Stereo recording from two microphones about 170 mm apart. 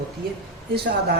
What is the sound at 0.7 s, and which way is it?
Speech, 65° right (ahead or behind).